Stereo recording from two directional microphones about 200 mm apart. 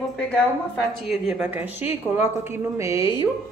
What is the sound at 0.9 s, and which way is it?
Speech, centre (ahead or behind).